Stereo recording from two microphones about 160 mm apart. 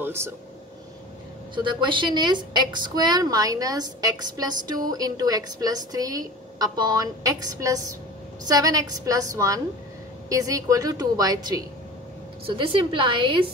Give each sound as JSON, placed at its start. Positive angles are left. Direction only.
{"t": 0.0, "sound": "air conditioning", "side_deg": -15}
{"t": 1.5, "sound": "a woman's voice", "side_deg": -30}
{"t": 12.4, "sound": "a woman's voice", "side_deg": -35}